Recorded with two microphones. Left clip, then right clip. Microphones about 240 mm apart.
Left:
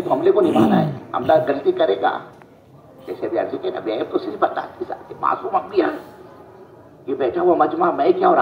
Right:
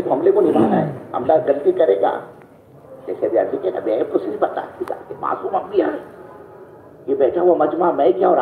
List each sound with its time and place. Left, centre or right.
0.1 s a sound: left
3.1 s a man's voice: left
7.1 s a man's voice: left